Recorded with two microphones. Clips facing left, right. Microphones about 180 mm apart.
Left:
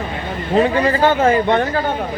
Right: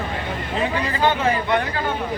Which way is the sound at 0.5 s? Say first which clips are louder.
Left 10 dB; 45° left (ahead or behind).